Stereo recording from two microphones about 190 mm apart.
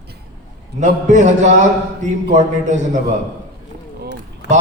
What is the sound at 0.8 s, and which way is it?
A man's voice, 40° right (ahead or behind).